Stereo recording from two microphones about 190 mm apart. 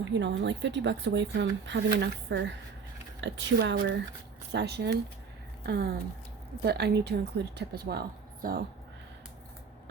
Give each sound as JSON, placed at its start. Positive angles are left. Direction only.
{"t": 0.0, "sound": "a woman's voice", "side_deg": -70}